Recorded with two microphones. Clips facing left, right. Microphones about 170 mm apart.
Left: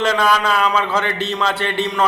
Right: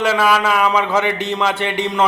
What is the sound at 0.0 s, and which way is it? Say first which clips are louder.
A man's voice: right 1 dB; 10° right (ahead or behind).